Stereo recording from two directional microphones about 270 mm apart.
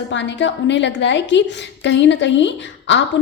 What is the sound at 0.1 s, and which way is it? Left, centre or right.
A woman's voice, left.